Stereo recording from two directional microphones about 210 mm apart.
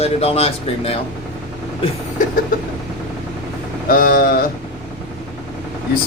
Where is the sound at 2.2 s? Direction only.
40° left (ahead or behind).